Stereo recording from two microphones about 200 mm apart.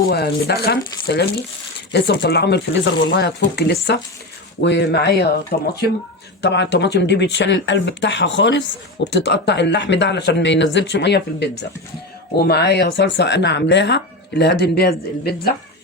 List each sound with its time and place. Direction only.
0.0 s speech: 55° left (ahead or behind)